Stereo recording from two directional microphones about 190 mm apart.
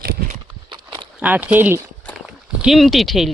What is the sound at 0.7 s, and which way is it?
Walk, 25° right (ahead or behind).